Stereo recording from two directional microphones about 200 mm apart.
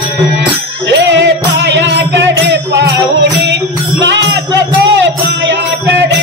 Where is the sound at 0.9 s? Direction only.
65° right (ahead or behind).